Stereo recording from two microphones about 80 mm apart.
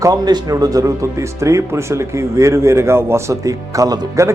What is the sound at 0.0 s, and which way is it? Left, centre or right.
A man's voice, right.